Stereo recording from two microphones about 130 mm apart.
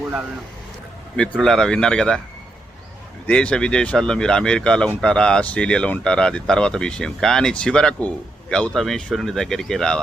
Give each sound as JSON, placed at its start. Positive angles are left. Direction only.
{"t": 1.1, "sound": "speech", "side_deg": 5}
{"t": 3.2, "sound": "speech", "side_deg": 10}